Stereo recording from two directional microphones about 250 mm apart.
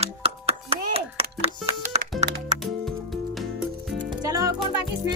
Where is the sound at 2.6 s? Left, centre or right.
Centre.